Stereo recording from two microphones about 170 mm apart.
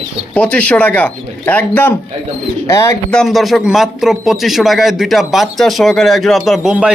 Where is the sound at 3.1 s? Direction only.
5° left (ahead or behind).